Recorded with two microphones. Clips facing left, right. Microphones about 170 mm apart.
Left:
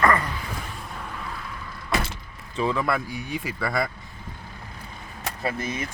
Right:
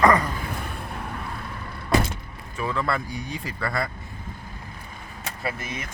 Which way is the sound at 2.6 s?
15° left (ahead or behind).